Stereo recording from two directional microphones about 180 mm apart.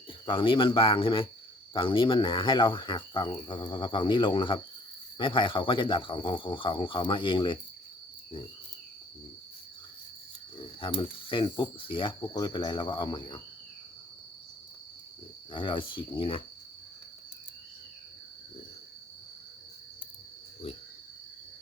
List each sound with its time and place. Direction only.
0.1 s cricket: 30° left (ahead or behind)
10.8 s cricket: 30° left (ahead or behind)
15.5 s cricket: 25° left (ahead or behind)